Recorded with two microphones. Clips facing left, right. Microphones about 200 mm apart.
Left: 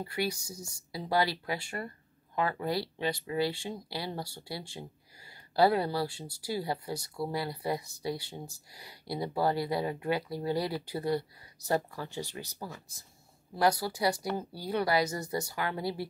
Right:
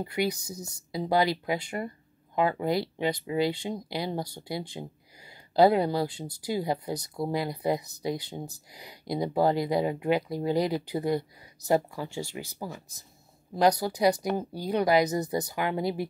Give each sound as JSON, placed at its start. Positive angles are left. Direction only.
{"t": 0.0, "sound": "speech", "side_deg": -20}
{"t": 13.6, "sound": "speech", "side_deg": -20}